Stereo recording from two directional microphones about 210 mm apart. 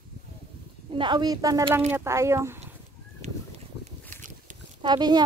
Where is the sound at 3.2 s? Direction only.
30° right (ahead or behind).